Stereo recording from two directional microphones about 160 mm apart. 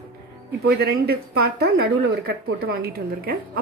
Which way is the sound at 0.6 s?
75° right (ahead or behind).